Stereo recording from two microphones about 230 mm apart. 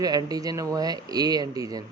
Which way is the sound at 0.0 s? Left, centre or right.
Centre.